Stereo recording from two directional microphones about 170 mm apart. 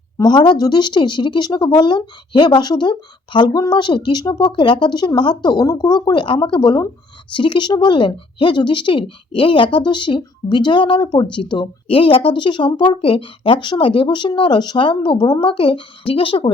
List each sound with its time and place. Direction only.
0.2 s speech: 25° left (ahead or behind)